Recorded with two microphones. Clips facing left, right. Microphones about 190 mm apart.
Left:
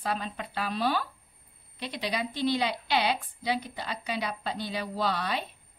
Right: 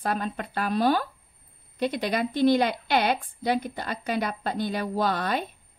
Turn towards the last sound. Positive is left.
turn(degrees=-50)  # may be behind; listen again after turning